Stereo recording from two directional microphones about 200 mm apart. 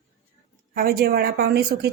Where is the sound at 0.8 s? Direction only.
50° right (ahead or behind).